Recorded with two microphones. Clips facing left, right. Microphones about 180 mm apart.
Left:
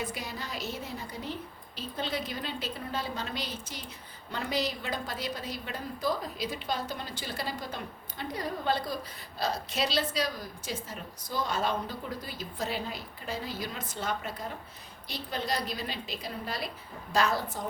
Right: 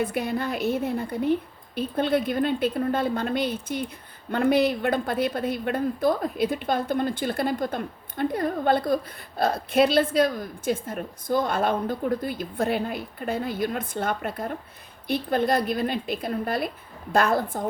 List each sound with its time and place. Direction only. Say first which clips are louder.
0.0 s a woman's voice: right 11 dB; 55° right (ahead or behind)